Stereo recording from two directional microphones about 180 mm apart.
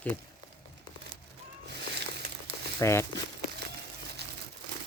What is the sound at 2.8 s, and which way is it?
Speech, 15° left (ahead or behind).